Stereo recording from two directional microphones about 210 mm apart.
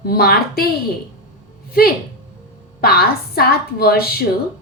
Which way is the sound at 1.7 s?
45° left (ahead or behind).